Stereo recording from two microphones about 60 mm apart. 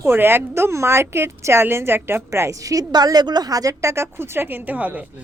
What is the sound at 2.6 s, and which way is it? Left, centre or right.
A woman's voice, right.